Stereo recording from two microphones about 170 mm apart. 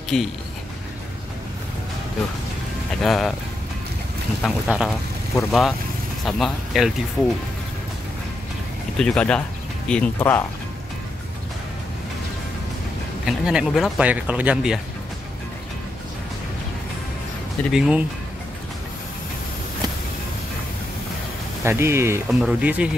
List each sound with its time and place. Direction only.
0.1 s speech: centre (ahead or behind)
3.0 s speech: centre (ahead or behind)
4.4 s speech: centre (ahead or behind)
8.9 s speech: 5° left (ahead or behind)
13.2 s speech: 5° right (ahead or behind)
17.6 s speech: 5° right (ahead or behind)
21.6 s speech: 15° right (ahead or behind)
22.3 s speech: 5° right (ahead or behind)